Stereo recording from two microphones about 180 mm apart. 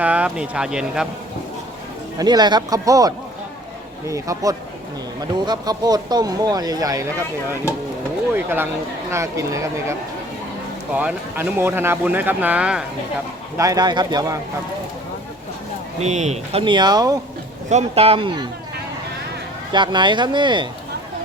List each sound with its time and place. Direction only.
0.0 s speech: 5° right (ahead or behind)
2.1 s speech: 20° right (ahead or behind)
10.9 s speech: 10° right (ahead or behind)
13.6 s speech: 20° right (ahead or behind)
16.0 s speech: 40° right (ahead or behind); by 17.2 s 20° right (ahead or behind)
17.7 s speech: 40° right (ahead or behind)
19.7 s speech: 25° right (ahead or behind)